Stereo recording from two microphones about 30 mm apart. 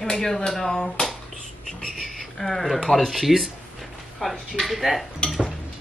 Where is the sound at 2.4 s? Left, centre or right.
Centre.